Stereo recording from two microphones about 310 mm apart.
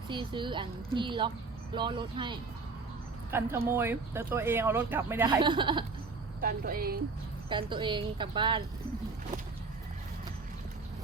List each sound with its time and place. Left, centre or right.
0.1 s speech: centre
6.4 s speech: right
7.5 s speech: centre